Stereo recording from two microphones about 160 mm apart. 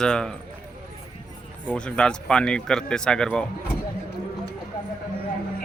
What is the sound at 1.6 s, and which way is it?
A man's voice, 10° left (ahead or behind).